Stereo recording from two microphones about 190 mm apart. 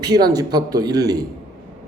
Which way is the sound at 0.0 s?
20° right (ahead or behind).